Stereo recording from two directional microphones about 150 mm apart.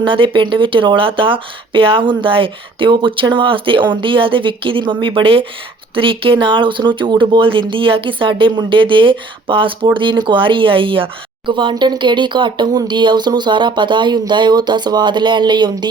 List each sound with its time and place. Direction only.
0.0 s speech: 35° right (ahead or behind)